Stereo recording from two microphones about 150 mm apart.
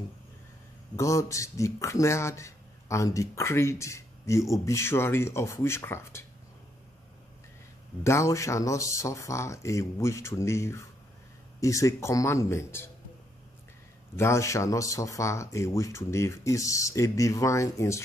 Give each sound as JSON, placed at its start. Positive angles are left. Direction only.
{"t": 0.9, "sound": "speech", "side_deg": 20}
{"t": 8.0, "sound": "speech", "side_deg": 20}
{"t": 14.1, "sound": "speech", "side_deg": 20}